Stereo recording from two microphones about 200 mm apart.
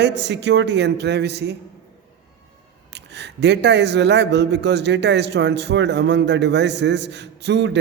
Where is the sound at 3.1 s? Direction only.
60° right (ahead or behind).